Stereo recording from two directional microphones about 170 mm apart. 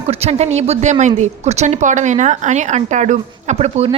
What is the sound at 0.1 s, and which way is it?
A woman's voice, 35° right (ahead or behind).